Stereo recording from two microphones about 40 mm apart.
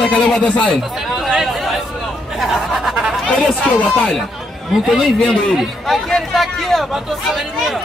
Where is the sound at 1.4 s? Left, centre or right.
Centre.